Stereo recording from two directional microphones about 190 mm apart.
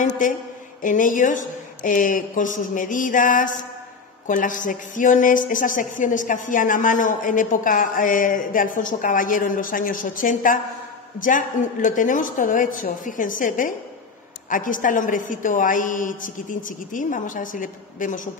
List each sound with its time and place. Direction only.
0.8 s a woman's voice: 45° left (ahead or behind)